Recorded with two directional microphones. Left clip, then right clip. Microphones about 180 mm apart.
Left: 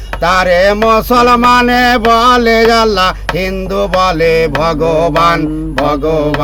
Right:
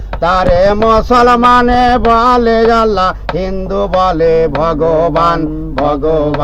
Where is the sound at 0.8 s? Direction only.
30° left (ahead or behind).